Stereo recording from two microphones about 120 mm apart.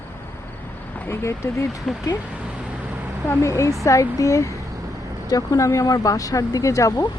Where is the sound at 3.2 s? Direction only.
25° left (ahead or behind).